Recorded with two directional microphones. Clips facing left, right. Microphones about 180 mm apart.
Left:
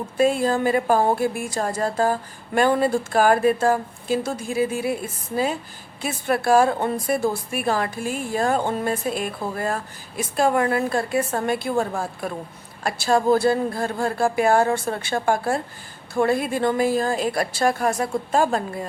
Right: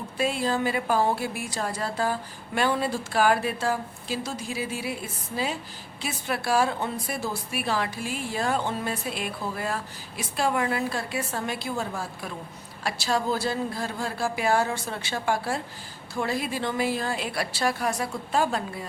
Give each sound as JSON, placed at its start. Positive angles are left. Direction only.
{"t": 0.2, "sound": "a woman's voice", "side_deg": 45}
{"t": 6.0, "sound": "a woman's voice", "side_deg": 50}